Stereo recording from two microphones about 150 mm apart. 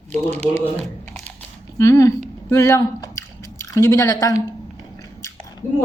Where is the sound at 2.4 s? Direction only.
20° left (ahead or behind).